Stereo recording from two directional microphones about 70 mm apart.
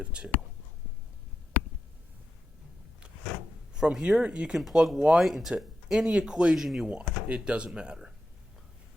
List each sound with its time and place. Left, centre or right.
0.0 s speech: centre
3.8 s speech: centre
4.6 s speech: centre
6.8 s speech: centre